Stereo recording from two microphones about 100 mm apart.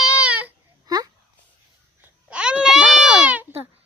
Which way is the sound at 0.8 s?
40° right (ahead or behind).